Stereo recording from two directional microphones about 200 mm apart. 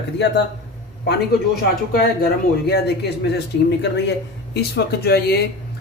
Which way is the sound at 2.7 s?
55° left (ahead or behind).